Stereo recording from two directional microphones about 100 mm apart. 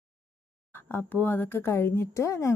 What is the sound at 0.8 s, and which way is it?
A woman's voice, 20° left (ahead or behind).